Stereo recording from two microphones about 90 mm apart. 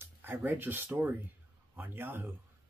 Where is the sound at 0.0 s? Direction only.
25° right (ahead or behind).